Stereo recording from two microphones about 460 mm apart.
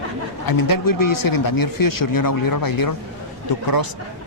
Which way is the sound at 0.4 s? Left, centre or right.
Left.